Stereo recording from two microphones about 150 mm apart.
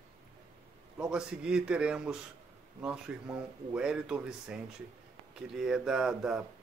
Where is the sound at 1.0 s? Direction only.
5° right (ahead or behind).